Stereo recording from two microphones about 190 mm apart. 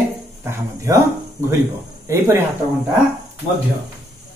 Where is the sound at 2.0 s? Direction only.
15° right (ahead or behind).